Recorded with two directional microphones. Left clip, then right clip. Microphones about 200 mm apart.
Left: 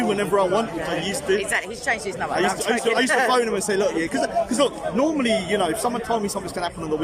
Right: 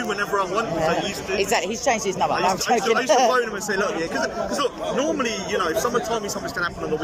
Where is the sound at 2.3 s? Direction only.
30° left (ahead or behind).